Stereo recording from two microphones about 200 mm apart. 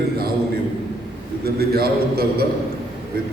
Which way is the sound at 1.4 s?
50° right (ahead or behind).